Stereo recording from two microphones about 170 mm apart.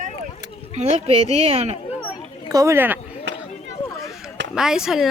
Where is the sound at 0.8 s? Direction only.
40° right (ahead or behind).